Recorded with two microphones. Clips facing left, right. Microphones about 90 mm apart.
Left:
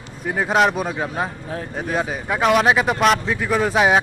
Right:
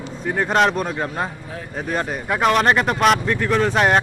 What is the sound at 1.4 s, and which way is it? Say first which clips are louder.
Speech: left 4 dB; 40° left (ahead or behind).